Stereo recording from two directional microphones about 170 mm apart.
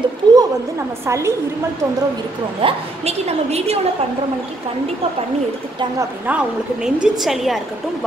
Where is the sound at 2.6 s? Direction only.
40° right (ahead or behind).